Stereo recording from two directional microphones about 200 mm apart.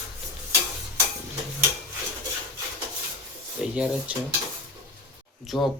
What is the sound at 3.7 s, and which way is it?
Speech, 5° right (ahead or behind).